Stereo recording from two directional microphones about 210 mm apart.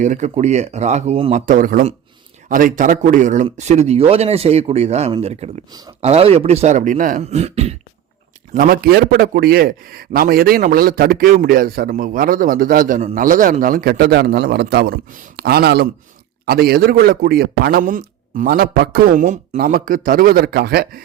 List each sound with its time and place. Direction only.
0.0 s speech: 35° right (ahead or behind)
8.5 s a man's voice: 40° right (ahead or behind)